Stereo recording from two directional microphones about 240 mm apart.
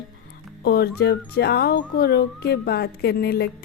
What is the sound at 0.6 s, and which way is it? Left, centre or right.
Speech, left.